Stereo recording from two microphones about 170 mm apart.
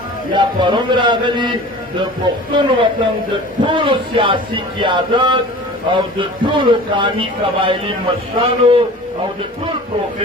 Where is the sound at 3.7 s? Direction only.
30° right (ahead or behind).